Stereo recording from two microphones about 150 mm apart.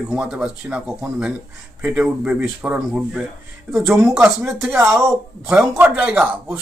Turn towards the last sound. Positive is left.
turn(degrees=-10)  # may be behind; listen again after turning